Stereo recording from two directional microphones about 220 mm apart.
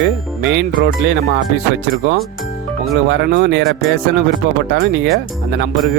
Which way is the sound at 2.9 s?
50° right (ahead or behind).